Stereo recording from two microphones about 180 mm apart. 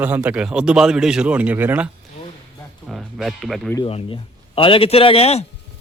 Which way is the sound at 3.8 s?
30° left (ahead or behind).